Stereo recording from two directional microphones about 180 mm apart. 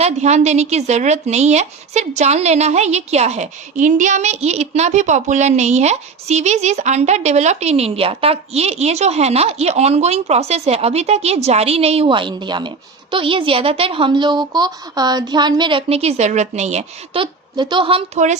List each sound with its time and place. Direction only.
0.0 s a woman's voice: 40° right (ahead or behind)
17.6 s a woman's voice: 25° right (ahead or behind)